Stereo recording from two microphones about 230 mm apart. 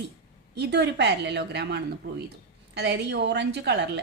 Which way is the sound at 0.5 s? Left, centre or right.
Right.